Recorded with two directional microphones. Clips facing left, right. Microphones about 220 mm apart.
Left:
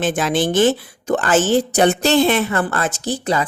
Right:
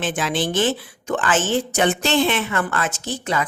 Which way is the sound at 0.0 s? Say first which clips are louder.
Left 5 dB; 40° left (ahead or behind).